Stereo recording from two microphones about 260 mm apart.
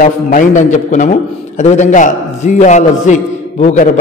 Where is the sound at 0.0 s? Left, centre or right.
Left.